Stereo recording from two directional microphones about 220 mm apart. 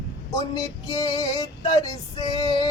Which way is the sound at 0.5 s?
20° left (ahead or behind).